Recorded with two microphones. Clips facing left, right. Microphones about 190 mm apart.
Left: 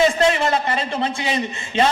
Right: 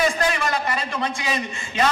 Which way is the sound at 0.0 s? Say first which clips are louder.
Left 5 dB; 25° left (ahead or behind).